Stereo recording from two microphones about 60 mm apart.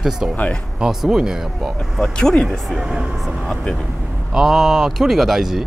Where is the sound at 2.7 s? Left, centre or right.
Centre.